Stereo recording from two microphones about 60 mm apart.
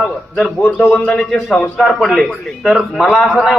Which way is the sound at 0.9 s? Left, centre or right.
Centre.